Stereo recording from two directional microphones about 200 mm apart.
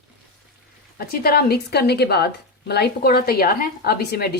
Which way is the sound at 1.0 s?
50° left (ahead or behind).